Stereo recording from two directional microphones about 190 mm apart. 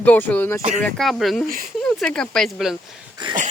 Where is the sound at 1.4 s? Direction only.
50° right (ahead or behind).